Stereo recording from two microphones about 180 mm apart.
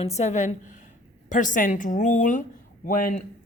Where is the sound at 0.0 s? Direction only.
40° left (ahead or behind).